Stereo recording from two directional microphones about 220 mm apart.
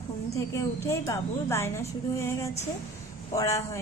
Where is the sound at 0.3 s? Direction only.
15° left (ahead or behind).